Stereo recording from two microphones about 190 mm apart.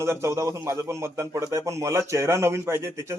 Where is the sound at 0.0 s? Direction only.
15° right (ahead or behind).